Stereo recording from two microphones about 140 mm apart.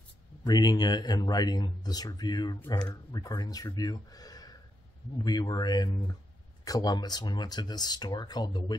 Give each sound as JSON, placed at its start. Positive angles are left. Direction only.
{"t": 0.4, "sound": "speech", "side_deg": 30}